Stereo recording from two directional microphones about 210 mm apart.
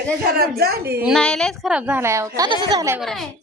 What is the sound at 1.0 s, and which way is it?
A woman's voice, centre (ahead or behind).